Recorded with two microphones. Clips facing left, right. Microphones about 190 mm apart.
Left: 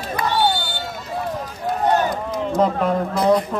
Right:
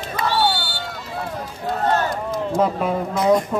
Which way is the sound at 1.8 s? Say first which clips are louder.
Left 2 dB; 15° left (ahead or behind).